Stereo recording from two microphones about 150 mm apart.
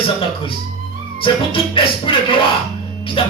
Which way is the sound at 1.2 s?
35° left (ahead or behind).